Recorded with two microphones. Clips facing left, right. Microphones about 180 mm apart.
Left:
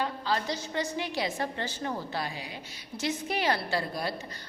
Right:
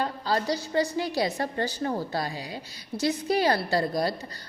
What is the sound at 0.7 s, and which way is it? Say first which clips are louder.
A woman's voice: right 7 dB; 35° right (ahead or behind).